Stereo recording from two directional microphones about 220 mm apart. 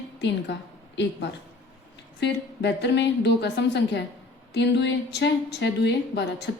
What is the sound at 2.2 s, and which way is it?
A woman's voice, 50° left (ahead or behind).